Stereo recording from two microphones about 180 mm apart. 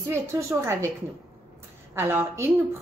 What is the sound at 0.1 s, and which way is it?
Speech, 15° right (ahead or behind).